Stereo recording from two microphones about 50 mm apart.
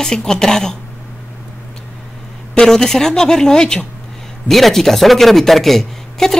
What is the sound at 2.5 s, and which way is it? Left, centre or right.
Speech, centre.